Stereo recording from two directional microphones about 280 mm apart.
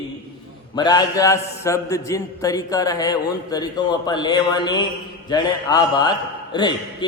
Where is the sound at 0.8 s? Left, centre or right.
Centre.